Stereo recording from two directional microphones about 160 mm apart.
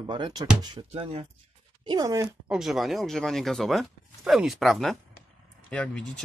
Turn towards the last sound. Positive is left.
turn(degrees=5)  # may be behind; listen again after turning